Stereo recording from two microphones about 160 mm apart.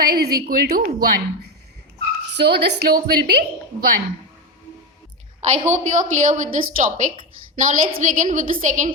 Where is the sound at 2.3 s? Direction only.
90° right.